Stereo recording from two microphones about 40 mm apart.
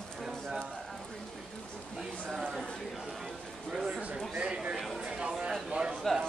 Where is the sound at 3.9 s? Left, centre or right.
Right.